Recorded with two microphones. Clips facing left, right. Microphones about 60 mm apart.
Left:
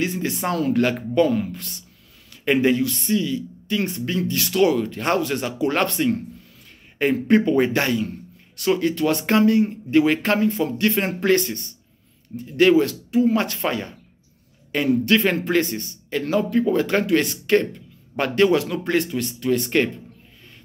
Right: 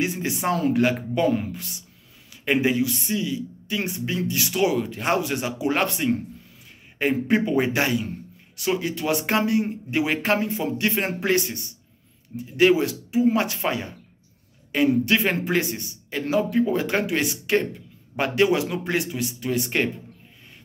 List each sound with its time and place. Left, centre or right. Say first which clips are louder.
0.0 s a man's voice: left 1 dB; centre
2.4 s a man's voice: left 3 dB; centre